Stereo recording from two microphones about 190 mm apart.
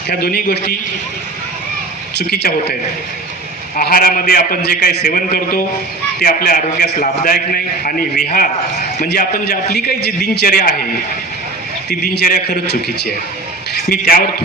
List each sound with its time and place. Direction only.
0.1 s a man's voice: 55° left (ahead or behind)
2.1 s a man's voice: 60° left (ahead or behind)
3.8 s a man's voice: 50° left (ahead or behind)
11.9 s a man's voice: 55° left (ahead or behind)